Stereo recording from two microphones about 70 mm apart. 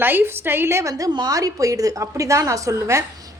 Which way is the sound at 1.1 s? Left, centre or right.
Right.